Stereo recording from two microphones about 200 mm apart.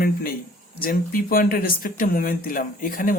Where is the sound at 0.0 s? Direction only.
45° left (ahead or behind).